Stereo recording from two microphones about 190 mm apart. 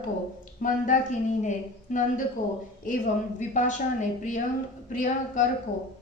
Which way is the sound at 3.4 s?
40° left (ahead or behind).